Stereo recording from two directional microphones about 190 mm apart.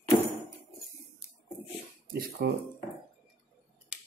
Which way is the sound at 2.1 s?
55° right (ahead or behind).